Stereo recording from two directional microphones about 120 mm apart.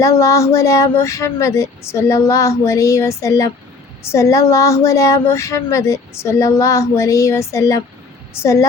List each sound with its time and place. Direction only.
0.0 s a woman's voice: 25° left (ahead or behind)